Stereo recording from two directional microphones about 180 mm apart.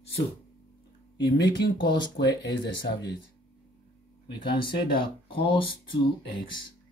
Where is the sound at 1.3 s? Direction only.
75° left (ahead or behind).